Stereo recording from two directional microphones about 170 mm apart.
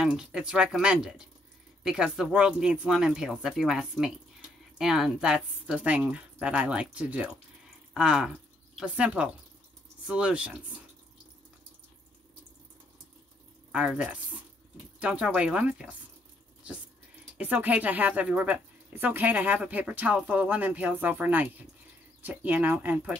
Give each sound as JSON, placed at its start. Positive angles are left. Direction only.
{"t": 0.0, "sound": "speech", "side_deg": -5}
{"t": 13.7, "sound": "speech", "side_deg": -5}
{"t": 17.4, "sound": "speech", "side_deg": -10}